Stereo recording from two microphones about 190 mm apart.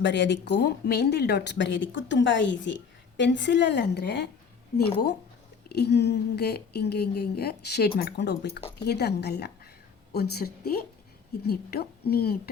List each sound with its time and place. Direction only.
0.0 s speech: 70° left (ahead or behind)
5.6 s a woman's voice: 60° left (ahead or behind)